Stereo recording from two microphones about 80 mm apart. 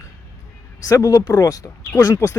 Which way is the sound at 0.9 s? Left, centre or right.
Left.